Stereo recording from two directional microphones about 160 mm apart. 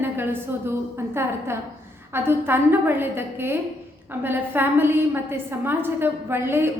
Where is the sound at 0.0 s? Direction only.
15° right (ahead or behind).